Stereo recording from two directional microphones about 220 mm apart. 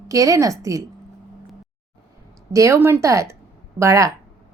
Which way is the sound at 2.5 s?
15° right (ahead or behind).